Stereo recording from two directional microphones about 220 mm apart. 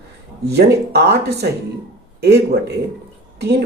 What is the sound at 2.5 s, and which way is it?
Speech, 45° right (ahead or behind).